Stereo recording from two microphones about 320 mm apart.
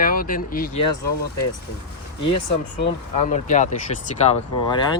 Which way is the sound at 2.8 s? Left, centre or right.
Left.